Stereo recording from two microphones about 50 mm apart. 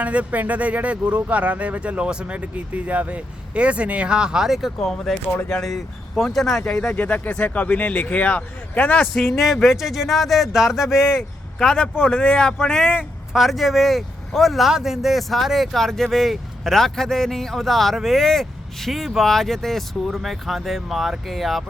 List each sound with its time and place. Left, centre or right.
0.0 s speech: right; by 4.7 s centre
4.8 s speech: centre
6.9 s speech: left
9.1 s speech: centre
11.8 s speech: left
12.5 s speech: centre
13.0 s speech: centre